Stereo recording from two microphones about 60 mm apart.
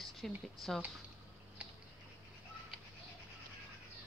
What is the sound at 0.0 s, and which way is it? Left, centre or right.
Speech, centre.